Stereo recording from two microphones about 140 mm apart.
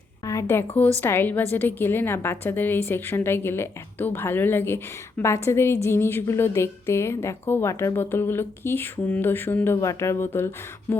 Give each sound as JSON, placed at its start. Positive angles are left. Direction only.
{"t": 0.3, "sound": "a woman's voice", "side_deg": 20}